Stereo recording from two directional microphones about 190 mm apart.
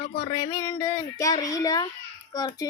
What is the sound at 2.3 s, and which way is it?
Speech, 20° left (ahead or behind).